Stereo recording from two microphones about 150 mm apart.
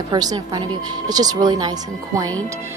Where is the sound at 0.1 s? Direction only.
25° right (ahead or behind).